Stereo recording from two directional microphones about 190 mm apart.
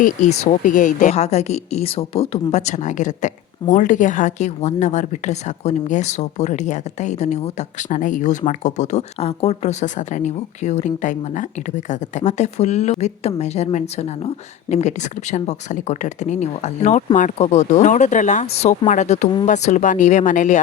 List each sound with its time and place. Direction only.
0.0 s speech: 40° left (ahead or behind)